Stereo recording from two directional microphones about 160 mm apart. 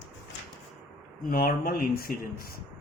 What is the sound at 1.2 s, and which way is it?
Speech, 60° left (ahead or behind).